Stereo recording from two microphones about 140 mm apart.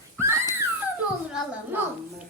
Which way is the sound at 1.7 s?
15° right (ahead or behind).